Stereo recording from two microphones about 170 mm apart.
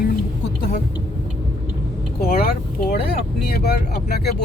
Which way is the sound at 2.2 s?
65° left (ahead or behind).